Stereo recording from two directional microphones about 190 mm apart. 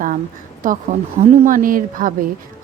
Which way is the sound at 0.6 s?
45° right (ahead or behind).